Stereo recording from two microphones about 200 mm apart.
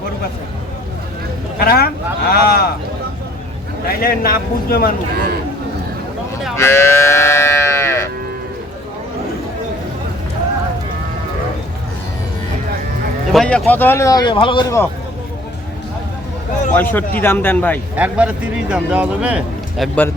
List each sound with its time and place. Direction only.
1.5 s a sound: 50° left (ahead or behind)
4.0 s a man's voice: 50° left (ahead or behind)
6.6 s livestock: 15° left (ahead or behind)
13.3 s speech: centre (ahead or behind); by 14.8 s 20° left (ahead or behind)
16.7 s speech: 10° left (ahead or behind)
17.9 s a man's voice: 5° right (ahead or behind)